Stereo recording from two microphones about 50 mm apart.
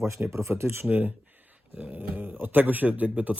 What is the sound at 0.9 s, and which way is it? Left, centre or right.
Speech, right.